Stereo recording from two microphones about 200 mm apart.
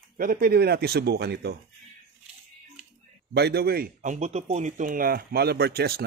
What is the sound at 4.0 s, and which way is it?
Speech, 35° right (ahead or behind).